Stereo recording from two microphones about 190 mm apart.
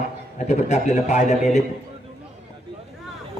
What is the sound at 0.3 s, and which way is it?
Speech, 40° left (ahead or behind).